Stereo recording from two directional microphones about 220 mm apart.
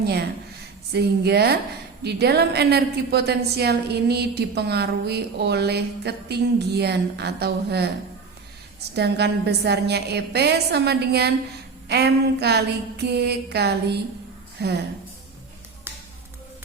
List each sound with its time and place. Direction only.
0.0 s a woman's voice: 45° right (ahead or behind)
9.0 s a woman's voice: 50° right (ahead or behind)